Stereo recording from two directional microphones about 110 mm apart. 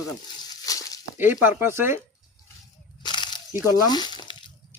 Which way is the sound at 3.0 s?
40° left (ahead or behind).